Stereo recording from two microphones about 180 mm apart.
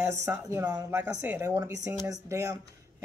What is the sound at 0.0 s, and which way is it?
Speech, 15° right (ahead or behind).